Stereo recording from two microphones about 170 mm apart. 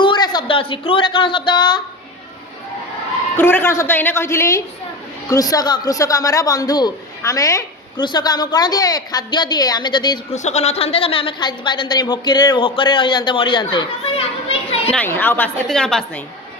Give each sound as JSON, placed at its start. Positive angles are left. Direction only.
{"t": 0.0, "sound": "speech", "side_deg": 25}
{"t": 3.3, "sound": "a woman's voice", "side_deg": 10}
{"t": 10.3, "sound": "a man's voice", "side_deg": 40}
{"t": 14.9, "sound": "a woman's voice", "side_deg": 10}